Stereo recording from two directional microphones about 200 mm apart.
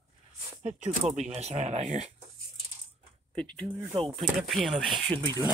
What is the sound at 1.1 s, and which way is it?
Speech, 35° right (ahead or behind).